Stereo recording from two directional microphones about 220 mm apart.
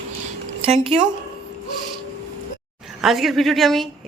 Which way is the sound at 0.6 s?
25° right (ahead or behind).